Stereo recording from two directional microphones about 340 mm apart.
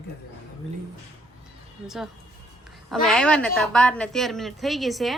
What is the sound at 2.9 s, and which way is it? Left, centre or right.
A woman's voice, centre.